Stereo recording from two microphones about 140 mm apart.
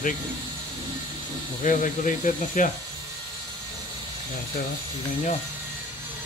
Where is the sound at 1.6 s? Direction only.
70° left (ahead or behind).